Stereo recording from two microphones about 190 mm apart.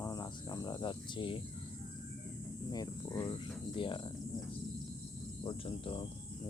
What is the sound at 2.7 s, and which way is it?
Cricket, 20° left (ahead or behind).